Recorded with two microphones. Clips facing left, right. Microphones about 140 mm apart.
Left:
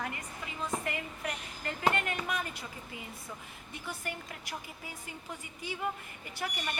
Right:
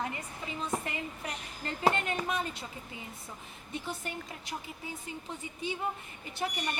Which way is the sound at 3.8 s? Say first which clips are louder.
Left 2 dB; 25° right (ahead or behind).